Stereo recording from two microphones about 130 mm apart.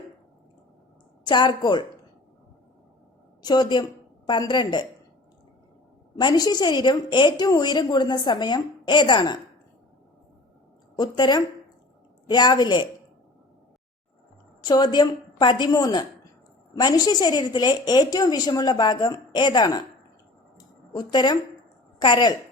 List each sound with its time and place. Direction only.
1.3 s a woman's voice: 35° left (ahead or behind)
3.4 s a woman's voice: 35° left (ahead or behind)
6.1 s a woman's voice: 35° left (ahead or behind)
10.9 s a woman's voice: 35° left (ahead or behind)
14.6 s a woman's voice: 30° left (ahead or behind)
20.9 s a woman's voice: 35° left (ahead or behind)